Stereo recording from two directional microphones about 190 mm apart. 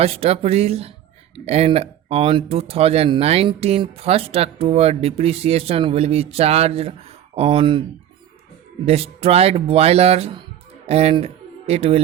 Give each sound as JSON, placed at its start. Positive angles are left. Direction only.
{"t": 0.0, "sound": "speech", "side_deg": -30}
{"t": 8.9, "sound": "speech", "side_deg": -30}